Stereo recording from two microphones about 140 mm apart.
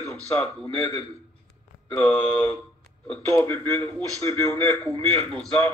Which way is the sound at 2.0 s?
15° left (ahead or behind).